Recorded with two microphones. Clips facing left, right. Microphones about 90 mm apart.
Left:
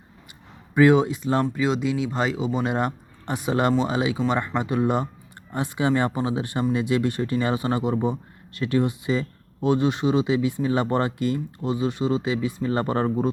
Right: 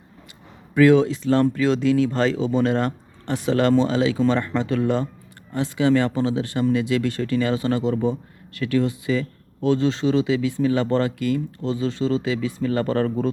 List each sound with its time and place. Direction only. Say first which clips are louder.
0.7 s speech: right 2 dB; 20° left (ahead or behind)